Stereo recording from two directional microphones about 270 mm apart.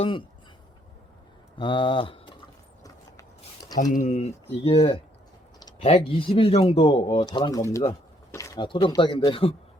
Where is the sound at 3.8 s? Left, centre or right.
Left.